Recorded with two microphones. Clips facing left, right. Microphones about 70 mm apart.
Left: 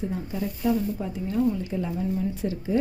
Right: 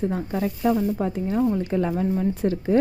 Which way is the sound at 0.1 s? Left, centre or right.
Right.